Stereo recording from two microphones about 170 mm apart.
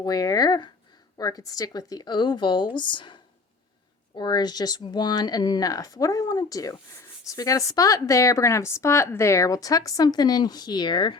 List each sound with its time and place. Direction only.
0.0 s speech: 20° left (ahead or behind)
4.2 s speech: 25° left (ahead or behind)